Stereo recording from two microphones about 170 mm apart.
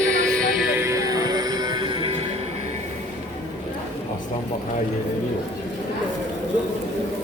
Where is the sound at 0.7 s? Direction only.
15° right (ahead or behind).